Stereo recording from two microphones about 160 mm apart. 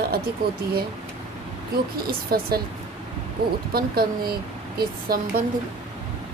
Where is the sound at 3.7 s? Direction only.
75° right (ahead or behind).